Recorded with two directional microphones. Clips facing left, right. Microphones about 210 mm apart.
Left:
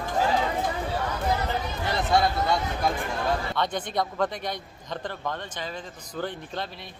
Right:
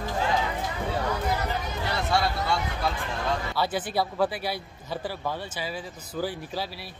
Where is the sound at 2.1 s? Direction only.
20° left (ahead or behind).